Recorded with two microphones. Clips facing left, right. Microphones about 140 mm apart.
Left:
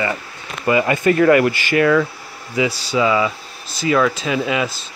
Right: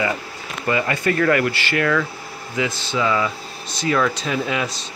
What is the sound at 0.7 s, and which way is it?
Speech, 20° left (ahead or behind).